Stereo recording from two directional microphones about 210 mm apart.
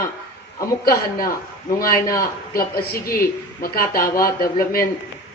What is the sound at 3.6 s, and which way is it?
Speech, 45° left (ahead or behind).